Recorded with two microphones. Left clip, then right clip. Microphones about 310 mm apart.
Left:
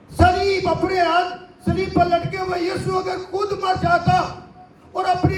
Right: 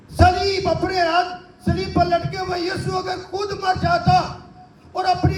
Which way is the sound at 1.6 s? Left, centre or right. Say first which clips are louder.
Left 1 dB; right.